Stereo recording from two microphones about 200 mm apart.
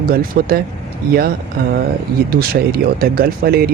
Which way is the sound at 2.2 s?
50° right (ahead or behind).